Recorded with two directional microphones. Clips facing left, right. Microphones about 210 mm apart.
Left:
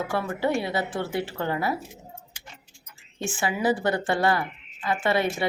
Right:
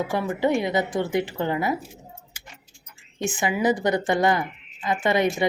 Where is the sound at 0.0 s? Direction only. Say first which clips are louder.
Right 3 dB; 15° right (ahead or behind).